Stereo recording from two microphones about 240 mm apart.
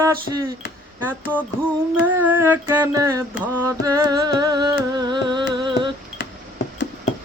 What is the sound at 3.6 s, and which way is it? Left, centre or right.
Music, centre.